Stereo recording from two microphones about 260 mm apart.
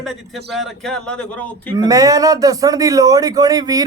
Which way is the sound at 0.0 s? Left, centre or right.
Centre.